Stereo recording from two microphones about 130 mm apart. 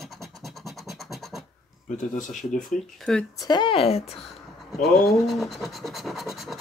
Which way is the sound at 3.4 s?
35° left (ahead or behind).